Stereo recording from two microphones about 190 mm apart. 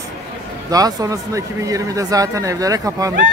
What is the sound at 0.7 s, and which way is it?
Speech, 20° right (ahead or behind).